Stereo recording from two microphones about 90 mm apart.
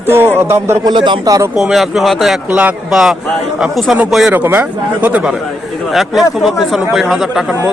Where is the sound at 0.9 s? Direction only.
60° right (ahead or behind).